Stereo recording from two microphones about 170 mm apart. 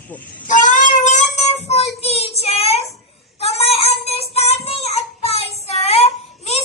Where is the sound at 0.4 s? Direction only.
50° left (ahead or behind).